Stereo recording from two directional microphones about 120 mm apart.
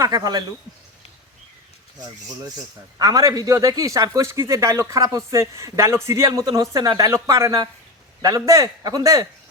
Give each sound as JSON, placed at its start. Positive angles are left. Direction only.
{"t": 0.0, "sound": "speech", "side_deg": -35}
{"t": 3.0, "sound": "a man's voice", "side_deg": -30}